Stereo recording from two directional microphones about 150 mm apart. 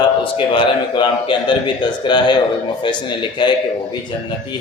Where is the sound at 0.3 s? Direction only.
30° left (ahead or behind).